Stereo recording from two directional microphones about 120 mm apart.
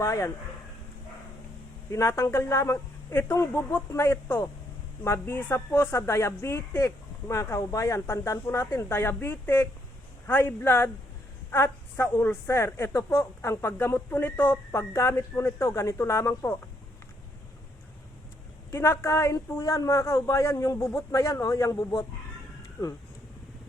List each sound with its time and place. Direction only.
0.0 s a woman's voice: 25° left (ahead or behind)
1.9 s a woman's voice: 25° left (ahead or behind)
18.7 s a woman's voice: 20° left (ahead or behind)